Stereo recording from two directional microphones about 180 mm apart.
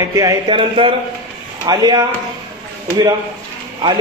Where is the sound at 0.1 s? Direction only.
20° right (ahead or behind).